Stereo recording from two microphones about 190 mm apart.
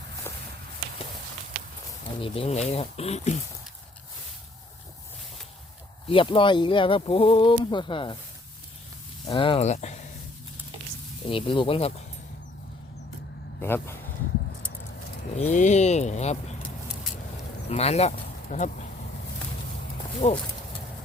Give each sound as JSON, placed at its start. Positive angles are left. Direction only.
{"t": 0.3, "sound": "walk", "side_deg": 15}
{"t": 2.2, "sound": "speech", "side_deg": 30}
{"t": 6.1, "sound": "speech", "side_deg": 25}
{"t": 9.2, "sound": "speech", "side_deg": 25}
{"t": 11.3, "sound": "speech", "side_deg": 25}
{"t": 13.6, "sound": "speech", "side_deg": 10}
{"t": 15.4, "sound": "speech", "side_deg": 35}
{"t": 17.7, "sound": "speech", "side_deg": 35}
{"t": 20.2, "sound": "speech", "side_deg": 35}